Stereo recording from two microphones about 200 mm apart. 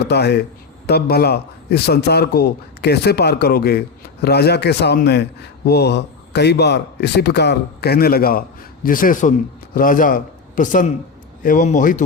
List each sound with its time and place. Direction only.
0.0 s a man's voice: 55° left (ahead or behind); by 12.0 s 40° left (ahead or behind)